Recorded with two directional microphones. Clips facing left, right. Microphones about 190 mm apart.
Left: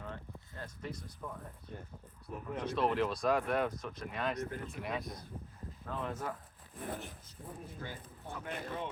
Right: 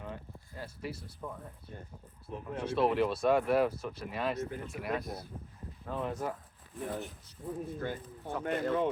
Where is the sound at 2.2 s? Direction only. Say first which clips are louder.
Right 2 dB; 5° right (ahead or behind).